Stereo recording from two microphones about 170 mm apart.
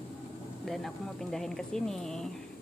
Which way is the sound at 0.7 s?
Centre (ahead or behind).